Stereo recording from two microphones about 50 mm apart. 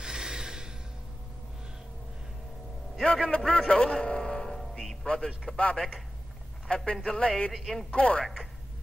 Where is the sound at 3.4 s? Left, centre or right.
Centre.